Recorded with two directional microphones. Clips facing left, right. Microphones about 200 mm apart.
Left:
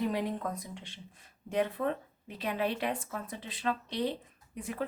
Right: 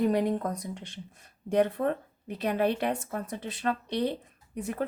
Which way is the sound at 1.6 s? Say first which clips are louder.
Right 5 dB; 45° right (ahead or behind).